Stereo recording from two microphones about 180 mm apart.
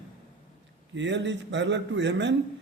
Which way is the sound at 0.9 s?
90° right.